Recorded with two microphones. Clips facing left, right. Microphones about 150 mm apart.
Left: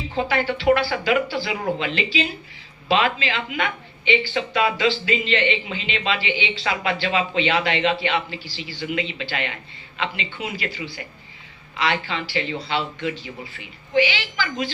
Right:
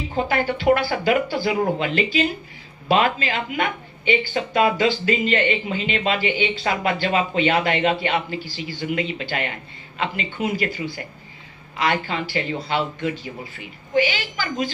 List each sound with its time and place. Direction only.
0.1 s speech: 45° right (ahead or behind)